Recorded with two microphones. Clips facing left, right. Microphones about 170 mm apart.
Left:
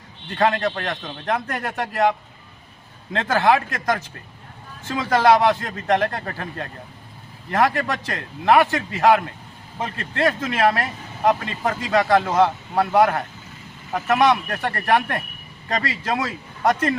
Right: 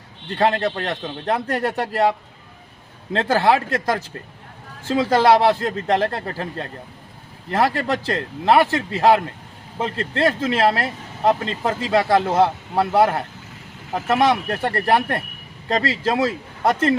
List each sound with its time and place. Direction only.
0.3 s a man's voice: 30° right (ahead or behind)
7.5 s a man's voice: 30° right (ahead or behind)